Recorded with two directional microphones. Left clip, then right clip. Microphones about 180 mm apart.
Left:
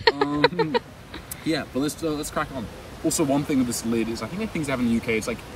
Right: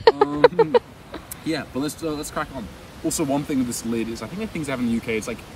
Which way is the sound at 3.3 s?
15° right (ahead or behind).